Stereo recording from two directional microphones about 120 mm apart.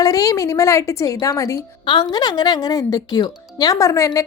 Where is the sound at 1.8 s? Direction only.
40° left (ahead or behind).